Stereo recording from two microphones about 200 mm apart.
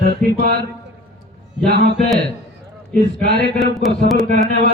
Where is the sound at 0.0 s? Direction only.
50° right (ahead or behind).